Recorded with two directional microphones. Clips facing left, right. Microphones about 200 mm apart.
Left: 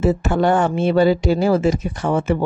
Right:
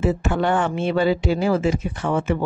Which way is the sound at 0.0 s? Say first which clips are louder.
Left 4 dB; 40° left (ahead or behind).